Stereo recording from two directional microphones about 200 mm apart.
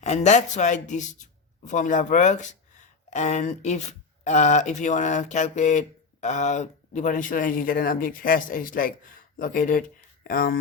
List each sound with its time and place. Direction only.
0.0 s speech: 35° left (ahead or behind)